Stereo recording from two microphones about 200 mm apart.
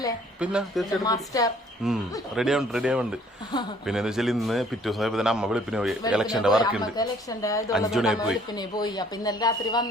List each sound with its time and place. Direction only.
0.3 s a man's voice: 5° right (ahead or behind)
1.0 s a woman's voice: 15° left (ahead or behind)
1.8 s a man's voice: centre (ahead or behind)
6.9 s a woman's voice: 20° left (ahead or behind)
7.7 s a man's voice: centre (ahead or behind)
8.5 s speech: 20° left (ahead or behind)